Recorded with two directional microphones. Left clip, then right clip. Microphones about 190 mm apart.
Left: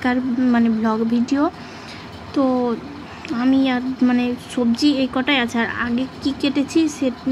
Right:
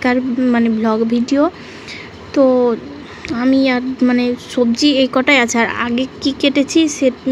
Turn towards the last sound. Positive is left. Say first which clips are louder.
# right 6 dB
turn(degrees=-15)  # may be behind; listen again after turning